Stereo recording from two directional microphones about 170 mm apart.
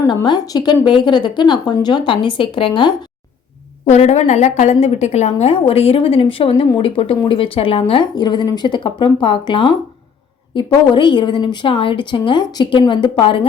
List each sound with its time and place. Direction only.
0.1 s a woman's voice: 25° left (ahead or behind)